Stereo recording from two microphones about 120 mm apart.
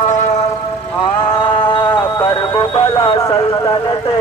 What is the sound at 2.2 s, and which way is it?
Music, 35° left (ahead or behind).